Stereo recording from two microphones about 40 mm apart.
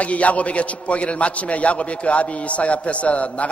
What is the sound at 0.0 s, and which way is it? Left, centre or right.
A man's voice, left.